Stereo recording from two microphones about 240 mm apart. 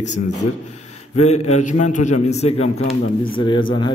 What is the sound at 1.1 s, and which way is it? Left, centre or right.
Speech, left.